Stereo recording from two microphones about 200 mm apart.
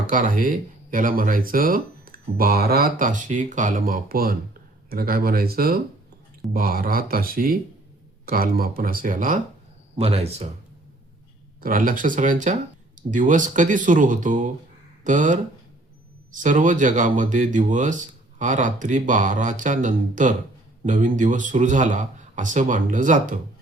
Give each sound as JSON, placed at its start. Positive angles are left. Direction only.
{"t": 0.1, "sound": "speech", "side_deg": -40}
{"t": 9.9, "sound": "speech", "side_deg": -30}
{"t": 11.6, "sound": "speech", "side_deg": -45}